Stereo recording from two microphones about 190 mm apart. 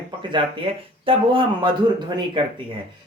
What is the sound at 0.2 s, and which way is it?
Speech, 25° right (ahead or behind).